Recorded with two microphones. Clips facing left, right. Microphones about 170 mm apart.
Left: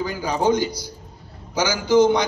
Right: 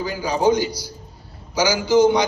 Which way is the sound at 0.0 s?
50° left (ahead or behind).